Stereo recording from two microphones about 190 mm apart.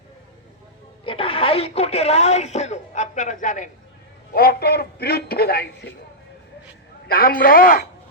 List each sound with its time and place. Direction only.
1.0 s speech: 30° left (ahead or behind)
4.4 s a man's voice: 55° left (ahead or behind)
7.1 s speech: 50° left (ahead or behind)